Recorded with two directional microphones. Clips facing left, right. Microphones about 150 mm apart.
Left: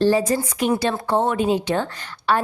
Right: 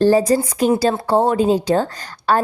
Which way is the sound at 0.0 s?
40° right (ahead or behind).